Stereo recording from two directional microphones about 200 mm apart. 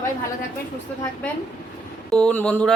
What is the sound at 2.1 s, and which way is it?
Speech, 5° left (ahead or behind).